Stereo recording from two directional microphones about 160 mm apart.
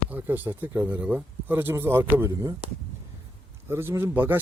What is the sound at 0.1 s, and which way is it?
Speech, 10° right (ahead or behind).